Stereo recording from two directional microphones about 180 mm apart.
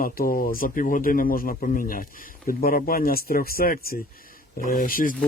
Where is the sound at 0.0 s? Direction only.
50° left (ahead or behind).